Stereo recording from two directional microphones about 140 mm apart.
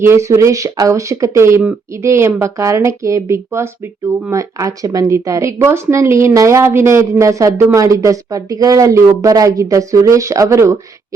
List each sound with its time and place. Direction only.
0.0 s speech: 20° right (ahead or behind)